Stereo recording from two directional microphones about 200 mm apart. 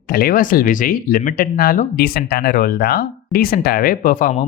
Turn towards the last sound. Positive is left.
turn(degrees=45)  # may be behind; listen again after turning